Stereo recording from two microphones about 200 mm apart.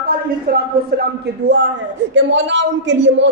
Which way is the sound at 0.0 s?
50° right (ahead or behind).